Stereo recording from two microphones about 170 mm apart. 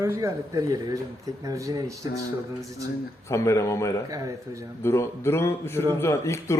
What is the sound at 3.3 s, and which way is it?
Speech, 15° left (ahead or behind).